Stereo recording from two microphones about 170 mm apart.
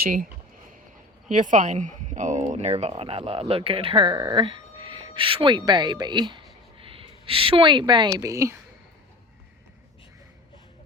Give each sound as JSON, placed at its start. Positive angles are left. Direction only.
{"t": 1.3, "sound": "speech", "side_deg": -50}
{"t": 4.1, "sound": "speech", "side_deg": -20}